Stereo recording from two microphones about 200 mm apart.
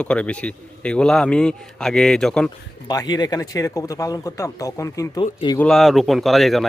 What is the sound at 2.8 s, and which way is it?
Speech, 20° left (ahead or behind).